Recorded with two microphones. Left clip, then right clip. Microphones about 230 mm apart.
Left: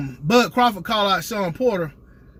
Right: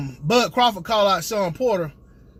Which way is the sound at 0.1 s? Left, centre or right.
Left.